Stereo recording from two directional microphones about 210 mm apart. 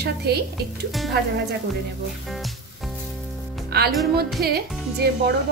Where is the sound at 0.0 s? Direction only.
50° right (ahead or behind).